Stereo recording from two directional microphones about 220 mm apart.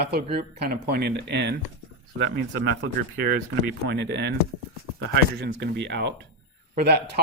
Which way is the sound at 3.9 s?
50° right (ahead or behind).